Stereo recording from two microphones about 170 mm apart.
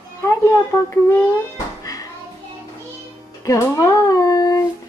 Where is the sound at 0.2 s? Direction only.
15° left (ahead or behind).